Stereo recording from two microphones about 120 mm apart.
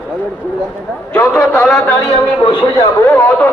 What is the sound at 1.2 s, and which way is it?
Speech, 20° left (ahead or behind).